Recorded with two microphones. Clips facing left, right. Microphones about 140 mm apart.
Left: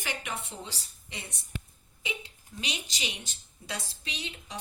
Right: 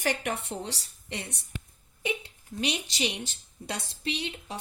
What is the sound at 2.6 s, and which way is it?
A woman's voice, 55° right (ahead or behind).